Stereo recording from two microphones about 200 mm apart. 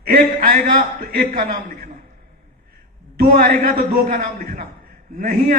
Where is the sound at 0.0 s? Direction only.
45° right (ahead or behind).